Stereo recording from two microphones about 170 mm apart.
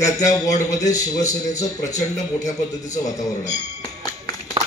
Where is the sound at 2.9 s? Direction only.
20° left (ahead or behind).